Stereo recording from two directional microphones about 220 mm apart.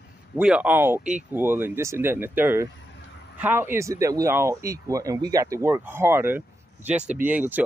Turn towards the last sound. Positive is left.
turn(degrees=-10)  # may be behind; listen again after turning